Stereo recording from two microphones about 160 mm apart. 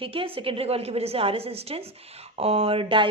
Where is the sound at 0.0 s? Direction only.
35° right (ahead or behind).